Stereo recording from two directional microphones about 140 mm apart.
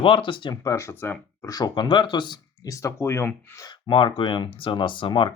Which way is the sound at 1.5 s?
30° left (ahead or behind).